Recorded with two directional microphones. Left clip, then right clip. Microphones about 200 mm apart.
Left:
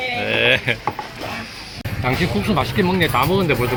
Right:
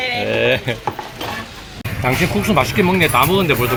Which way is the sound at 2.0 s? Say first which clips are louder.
Right 3 dB; 10° right (ahead or behind).